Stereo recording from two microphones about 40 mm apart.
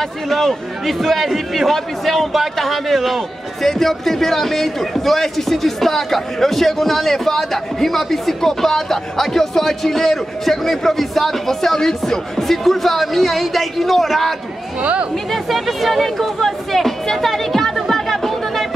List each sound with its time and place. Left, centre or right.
0.3 s a man's voice: centre
14.8 s speech: right
15.3 s music: centre